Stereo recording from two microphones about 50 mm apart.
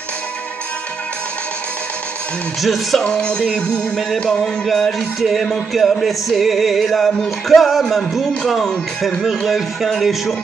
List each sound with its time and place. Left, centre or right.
2.6 s music: centre
3.0 s music: centre
4.4 s music: centre